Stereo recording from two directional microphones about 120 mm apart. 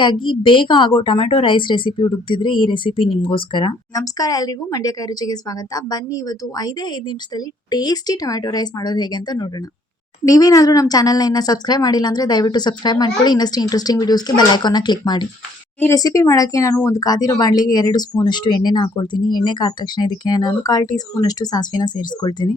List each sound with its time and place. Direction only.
0.0 s a woman's voice: 40° left (ahead or behind)
3.9 s speech: 30° left (ahead or behind)